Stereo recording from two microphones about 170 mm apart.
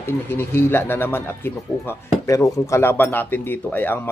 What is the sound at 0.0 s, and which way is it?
A man's voice, 15° left (ahead or behind).